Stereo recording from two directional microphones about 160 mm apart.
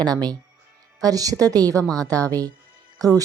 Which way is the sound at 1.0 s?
20° right (ahead or behind).